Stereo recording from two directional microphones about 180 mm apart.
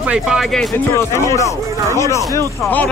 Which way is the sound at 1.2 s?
15° left (ahead or behind).